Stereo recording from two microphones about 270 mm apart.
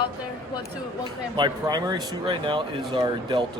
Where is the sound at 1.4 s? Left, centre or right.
Centre.